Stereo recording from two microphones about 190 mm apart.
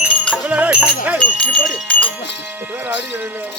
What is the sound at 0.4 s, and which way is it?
Music, 5° right (ahead or behind).